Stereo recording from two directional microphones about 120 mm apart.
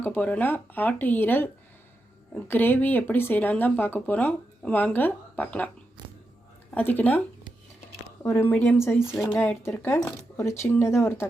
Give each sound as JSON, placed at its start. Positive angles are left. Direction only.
{"t": 0.0, "sound": "speech", "side_deg": 15}
{"t": 6.0, "sound": "a sound", "side_deg": -35}
{"t": 6.7, "sound": "speech", "side_deg": 15}
{"t": 8.2, "sound": "speech", "side_deg": 20}